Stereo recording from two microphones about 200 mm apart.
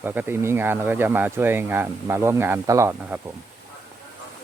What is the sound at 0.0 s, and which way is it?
Speech, 10° right (ahead or behind).